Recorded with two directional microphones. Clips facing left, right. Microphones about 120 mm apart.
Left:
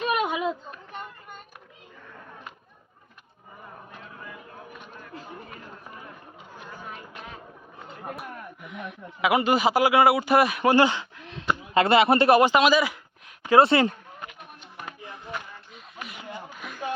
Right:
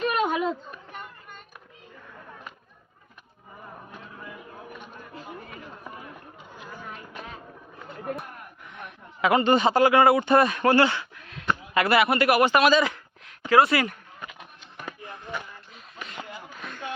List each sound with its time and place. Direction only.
0.1 s children playing: 5° left (ahead or behind)
8.1 s a sound: 5° left (ahead or behind)
9.2 s speech: 5° left (ahead or behind); by 12.5 s 25° left (ahead or behind)
12.5 s speech: 15° left (ahead or behind)
13.5 s speech: 25° left (ahead or behind)
16.6 s a sound: 5° left (ahead or behind)